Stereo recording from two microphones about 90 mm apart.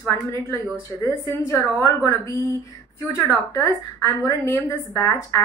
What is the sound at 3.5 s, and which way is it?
A woman's voice, 35° left (ahead or behind).